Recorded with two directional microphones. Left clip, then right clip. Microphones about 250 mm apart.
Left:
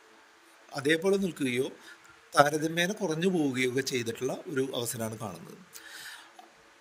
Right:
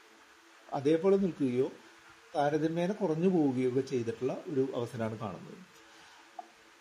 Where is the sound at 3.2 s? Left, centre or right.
Left.